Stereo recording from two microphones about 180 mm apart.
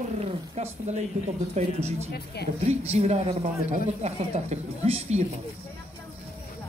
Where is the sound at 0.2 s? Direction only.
35° right (ahead or behind).